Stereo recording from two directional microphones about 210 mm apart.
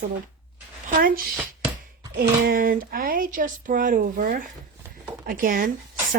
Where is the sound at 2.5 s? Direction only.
40° right (ahead or behind).